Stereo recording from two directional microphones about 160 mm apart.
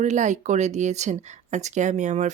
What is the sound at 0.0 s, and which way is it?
A woman's voice, 50° right (ahead or behind).